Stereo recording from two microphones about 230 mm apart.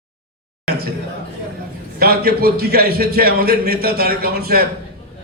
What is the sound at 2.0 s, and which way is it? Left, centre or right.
A man's voice, right.